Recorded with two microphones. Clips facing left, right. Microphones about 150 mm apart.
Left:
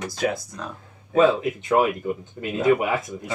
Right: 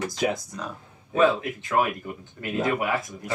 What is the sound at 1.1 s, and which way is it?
Speech, 20° left (ahead or behind).